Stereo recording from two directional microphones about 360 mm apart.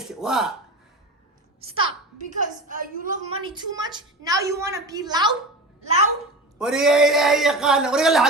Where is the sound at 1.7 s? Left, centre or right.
Centre.